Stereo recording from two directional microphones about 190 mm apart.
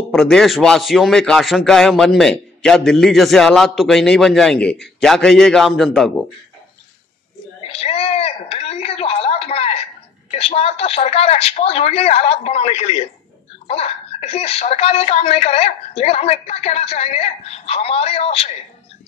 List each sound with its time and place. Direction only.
0.1 s a man's voice: centre (ahead or behind)
7.6 s a sound: 30° left (ahead or behind)
10.3 s speech: 30° left (ahead or behind)